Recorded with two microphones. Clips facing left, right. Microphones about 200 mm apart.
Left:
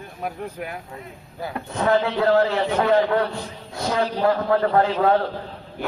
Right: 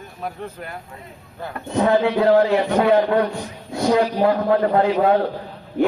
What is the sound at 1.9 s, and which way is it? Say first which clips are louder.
Speech: right 2 dB; 15° right (ahead or behind).